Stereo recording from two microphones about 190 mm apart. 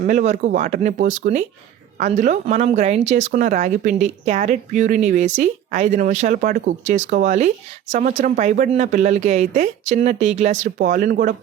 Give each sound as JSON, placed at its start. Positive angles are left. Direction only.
{"t": 0.1, "sound": "speech", "side_deg": -40}